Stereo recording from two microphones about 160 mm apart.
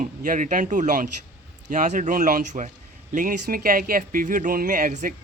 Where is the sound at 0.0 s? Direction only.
55° right (ahead or behind).